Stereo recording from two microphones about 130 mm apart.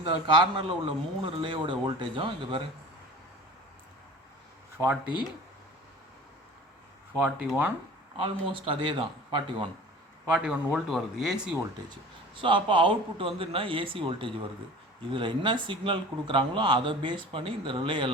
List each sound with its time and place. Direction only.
0.0 s speech: 40° right (ahead or behind)
4.8 s speech: 20° right (ahead or behind)
7.2 s speech: 10° right (ahead or behind)
8.2 s speech: 40° right (ahead or behind)
10.2 s speech: 10° right (ahead or behind)
11.9 s speech: 40° right (ahead or behind)